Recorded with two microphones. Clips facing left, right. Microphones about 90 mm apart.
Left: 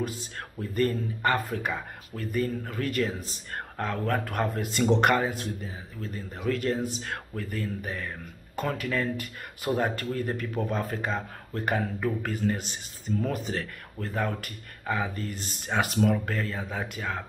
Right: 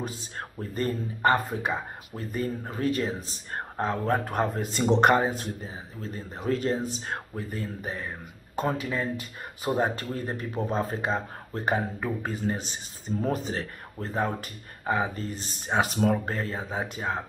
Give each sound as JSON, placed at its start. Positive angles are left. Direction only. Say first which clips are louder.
{"t": 0.0, "sound": "speech", "louder": "left 2 dB", "side_deg": -30}